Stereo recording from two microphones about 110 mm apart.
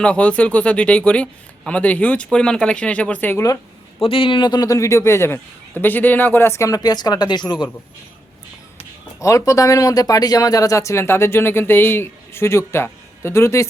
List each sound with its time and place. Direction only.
0.0 s speech: 10° left (ahead or behind)
4.0 s a man's voice: 55° left (ahead or behind)
9.2 s speech: 30° left (ahead or behind)